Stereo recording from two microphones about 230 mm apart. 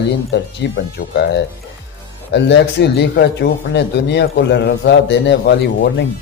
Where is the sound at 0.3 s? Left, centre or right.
Left.